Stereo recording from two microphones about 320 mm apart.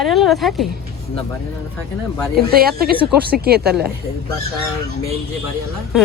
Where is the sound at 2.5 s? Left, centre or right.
Right.